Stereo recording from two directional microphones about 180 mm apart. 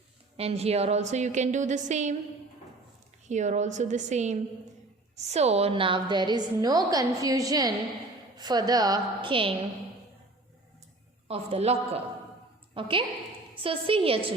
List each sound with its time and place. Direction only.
0.3 s a woman's voice: 35° right (ahead or behind)
3.2 s a woman's voice: 40° right (ahead or behind)
11.3 s a woman's voice: 35° right (ahead or behind)